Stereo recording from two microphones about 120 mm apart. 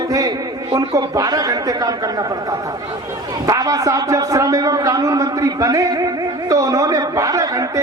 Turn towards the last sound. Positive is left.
turn(degrees=-30)  # may be behind; listen again after turning